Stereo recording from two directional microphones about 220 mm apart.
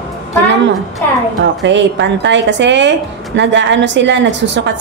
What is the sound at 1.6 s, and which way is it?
A woman's voice, 55° right (ahead or behind).